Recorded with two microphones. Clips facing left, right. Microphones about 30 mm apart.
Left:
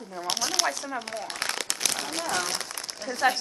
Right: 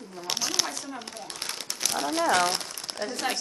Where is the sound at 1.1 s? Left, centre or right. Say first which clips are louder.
Left 6 dB; left.